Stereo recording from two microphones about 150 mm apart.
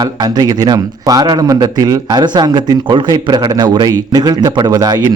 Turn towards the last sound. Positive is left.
turn(degrees=-25)  # may be behind; listen again after turning